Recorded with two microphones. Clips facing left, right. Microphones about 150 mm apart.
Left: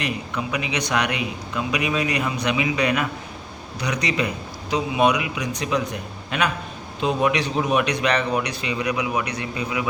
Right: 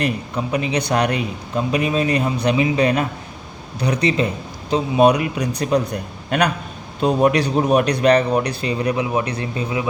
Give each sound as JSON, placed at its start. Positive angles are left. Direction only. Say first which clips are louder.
{"t": 0.0, "sound": "a man's voice", "louder": "right 5 dB", "side_deg": -35}